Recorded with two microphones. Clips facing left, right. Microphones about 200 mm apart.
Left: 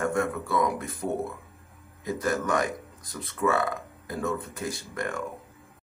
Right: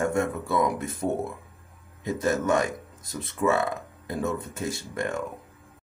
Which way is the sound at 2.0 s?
25° right (ahead or behind).